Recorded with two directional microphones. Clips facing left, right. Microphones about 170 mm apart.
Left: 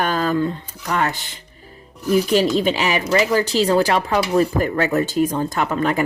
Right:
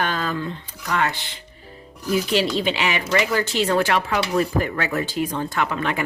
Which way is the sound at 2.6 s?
40° left (ahead or behind).